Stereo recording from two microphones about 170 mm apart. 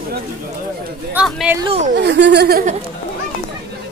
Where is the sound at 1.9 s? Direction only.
90° right; by 2.6 s 70° right (ahead or behind).